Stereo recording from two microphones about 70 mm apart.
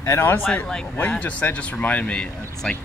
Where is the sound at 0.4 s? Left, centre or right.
Left.